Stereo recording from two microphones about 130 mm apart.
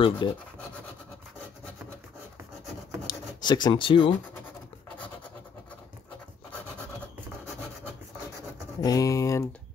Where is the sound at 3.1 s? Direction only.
35° left (ahead or behind).